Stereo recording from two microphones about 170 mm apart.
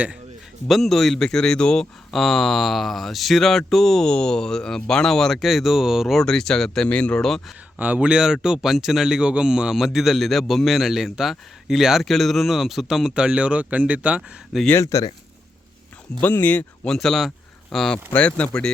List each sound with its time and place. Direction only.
0.7 s speech: centre (ahead or behind)
7.8 s speech: 10° right (ahead or behind)
14.7 s speech: 15° left (ahead or behind)
16.2 s speech: 10° left (ahead or behind)